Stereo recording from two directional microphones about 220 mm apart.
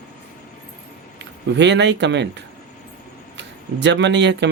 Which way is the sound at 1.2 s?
55° right (ahead or behind).